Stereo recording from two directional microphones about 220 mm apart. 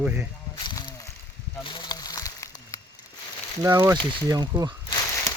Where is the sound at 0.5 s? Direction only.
20° left (ahead or behind).